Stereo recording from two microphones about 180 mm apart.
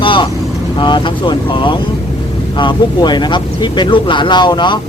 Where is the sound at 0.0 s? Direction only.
30° left (ahead or behind).